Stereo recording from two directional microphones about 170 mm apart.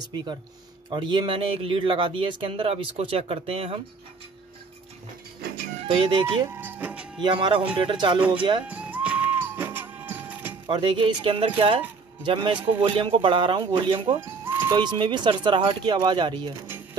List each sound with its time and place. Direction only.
0.1 s a man's voice: 25° right (ahead or behind)
5.8 s speech: 30° right (ahead or behind)
6.5 s speech: 10° right (ahead or behind)
7.2 s a man's voice: 25° right (ahead or behind)
8.6 s music: 10° right (ahead or behind)
10.7 s a man's voice: 30° right (ahead or behind)
14.2 s a sound: 10° right (ahead or behind)
14.8 s a man's voice: 25° right (ahead or behind)